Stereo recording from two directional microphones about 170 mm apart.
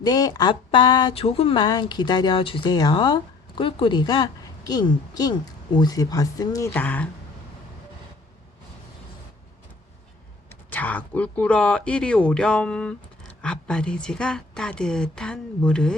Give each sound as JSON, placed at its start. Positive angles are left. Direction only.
{"t": 0.0, "sound": "speech", "side_deg": 20}
{"t": 6.7, "sound": "speech", "side_deg": 10}
{"t": 10.7, "sound": "a woman's voice", "side_deg": 10}